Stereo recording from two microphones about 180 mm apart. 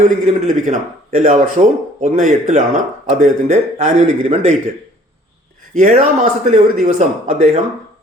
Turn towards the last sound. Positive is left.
turn(degrees=-40)  # may be behind; listen again after turning